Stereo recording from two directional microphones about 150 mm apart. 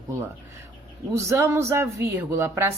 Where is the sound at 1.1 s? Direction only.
20° right (ahead or behind).